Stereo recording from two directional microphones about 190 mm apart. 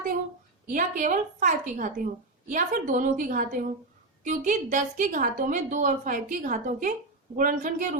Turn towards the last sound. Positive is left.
turn(degrees=-45)  # may be behind; listen again after turning